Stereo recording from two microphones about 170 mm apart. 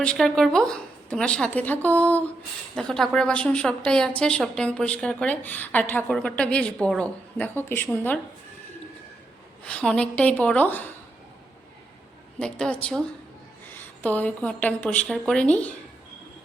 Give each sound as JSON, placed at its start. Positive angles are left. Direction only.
{"t": 0.0, "sound": "a woman's voice", "side_deg": 5}
{"t": 9.6, "sound": "a woman's voice", "side_deg": 5}
{"t": 12.4, "sound": "a woman's voice", "side_deg": 5}